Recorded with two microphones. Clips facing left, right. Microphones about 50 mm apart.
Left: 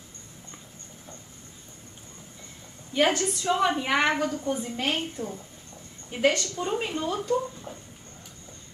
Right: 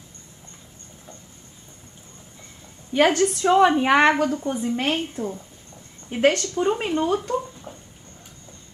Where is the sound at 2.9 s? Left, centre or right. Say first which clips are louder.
Right 5 dB; right.